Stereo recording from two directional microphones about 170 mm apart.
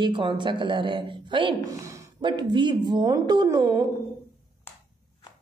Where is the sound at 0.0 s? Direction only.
30° right (ahead or behind).